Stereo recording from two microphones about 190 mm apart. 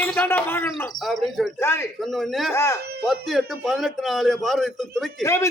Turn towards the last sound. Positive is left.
turn(degrees=15)  # may be behind; listen again after turning